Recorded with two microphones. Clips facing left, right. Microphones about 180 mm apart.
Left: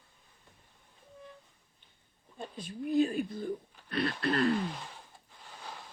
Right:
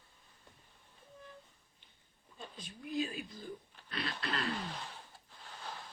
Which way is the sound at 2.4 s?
55° left (ahead or behind).